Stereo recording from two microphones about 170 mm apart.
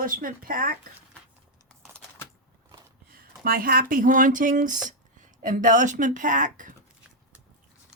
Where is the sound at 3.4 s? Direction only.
60° right (ahead or behind).